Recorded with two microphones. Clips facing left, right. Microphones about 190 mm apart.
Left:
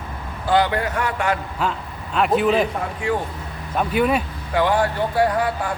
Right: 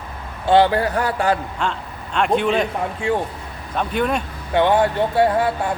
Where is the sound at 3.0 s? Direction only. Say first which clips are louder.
Right 2 dB; 25° right (ahead or behind).